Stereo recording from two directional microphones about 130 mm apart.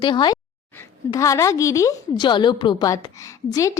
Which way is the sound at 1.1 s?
25° left (ahead or behind).